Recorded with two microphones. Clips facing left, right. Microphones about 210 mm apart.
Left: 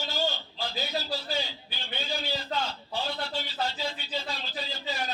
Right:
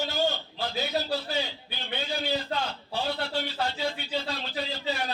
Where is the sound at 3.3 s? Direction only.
60° right (ahead or behind).